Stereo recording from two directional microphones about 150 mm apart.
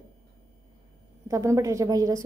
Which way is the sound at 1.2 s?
20° right (ahead or behind).